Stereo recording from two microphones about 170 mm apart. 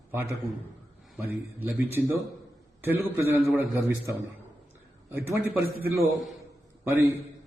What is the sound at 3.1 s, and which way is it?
A man's voice, 15° right (ahead or behind).